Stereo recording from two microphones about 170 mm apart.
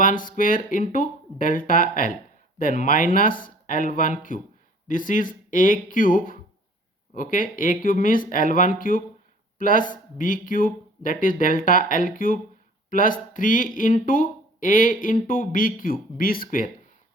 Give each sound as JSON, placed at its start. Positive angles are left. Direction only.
{"t": 0.0, "sound": "speech", "side_deg": 55}